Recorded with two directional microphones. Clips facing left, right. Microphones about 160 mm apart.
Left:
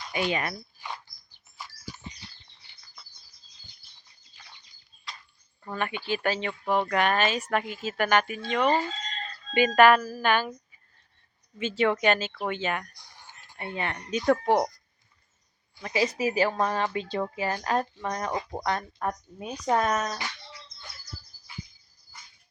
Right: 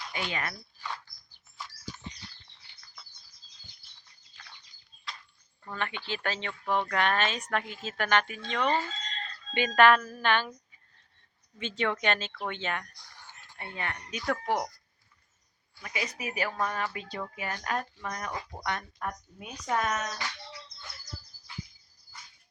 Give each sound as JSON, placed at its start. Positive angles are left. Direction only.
{"t": 0.1, "sound": "speech", "side_deg": 20}
{"t": 1.5, "sound": "a sound", "side_deg": 10}
{"t": 4.4, "sound": "bird", "side_deg": 10}
{"t": 5.6, "sound": "speech", "side_deg": 10}
{"t": 11.5, "sound": "speech", "side_deg": 5}
{"t": 15.8, "sound": "speech", "side_deg": 30}